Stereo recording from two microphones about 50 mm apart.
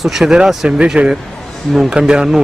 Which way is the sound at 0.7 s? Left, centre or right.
Right.